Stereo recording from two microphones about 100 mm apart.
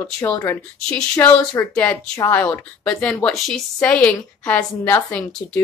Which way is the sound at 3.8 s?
15° left (ahead or behind).